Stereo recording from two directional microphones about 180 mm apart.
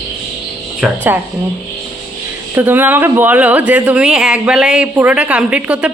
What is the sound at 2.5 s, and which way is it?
Speech, 10° right (ahead or behind).